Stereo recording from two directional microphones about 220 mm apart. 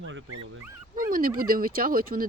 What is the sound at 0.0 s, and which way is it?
Dog, 60° right (ahead or behind).